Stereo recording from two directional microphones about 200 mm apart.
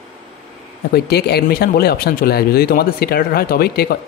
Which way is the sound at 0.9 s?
55° left (ahead or behind).